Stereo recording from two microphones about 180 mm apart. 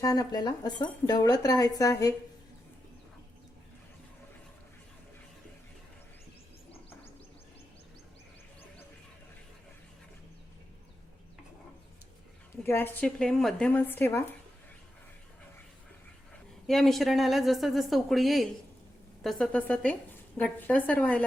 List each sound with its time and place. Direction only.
0.0 s speech: 20° left (ahead or behind)
12.6 s a woman's voice: 10° left (ahead or behind)
16.6 s a woman's voice: centre (ahead or behind)